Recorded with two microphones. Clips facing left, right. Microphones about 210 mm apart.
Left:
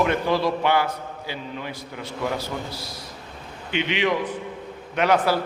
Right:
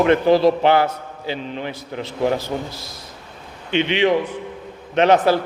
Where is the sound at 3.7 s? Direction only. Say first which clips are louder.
Right 6 dB; 25° right (ahead or behind).